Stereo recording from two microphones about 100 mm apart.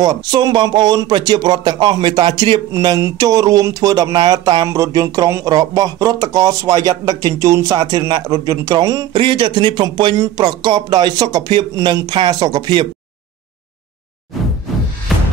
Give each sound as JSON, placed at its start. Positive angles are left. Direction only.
{"t": 0.0, "sound": "speech", "side_deg": -45}
{"t": 3.0, "sound": "speech", "side_deg": -35}
{"t": 4.6, "sound": "speech", "side_deg": -35}
{"t": 9.1, "sound": "speech", "side_deg": -55}
{"t": 14.3, "sound": "whoosh", "side_deg": 0}